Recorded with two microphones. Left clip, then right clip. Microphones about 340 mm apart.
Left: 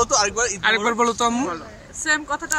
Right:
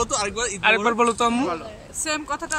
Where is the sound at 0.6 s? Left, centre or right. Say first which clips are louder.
Right 2 dB; centre.